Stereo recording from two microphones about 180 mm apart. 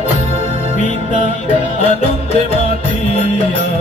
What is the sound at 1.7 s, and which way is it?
Music, 35° left (ahead or behind).